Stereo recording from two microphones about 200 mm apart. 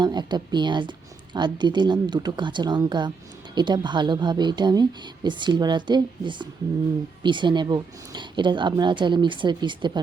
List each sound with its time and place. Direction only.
0.0 s a woman's voice: 20° right (ahead or behind)